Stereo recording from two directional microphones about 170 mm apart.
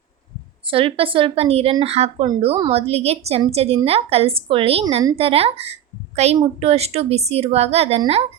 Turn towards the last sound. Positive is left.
turn(degrees=-35)  # may be behind; listen again after turning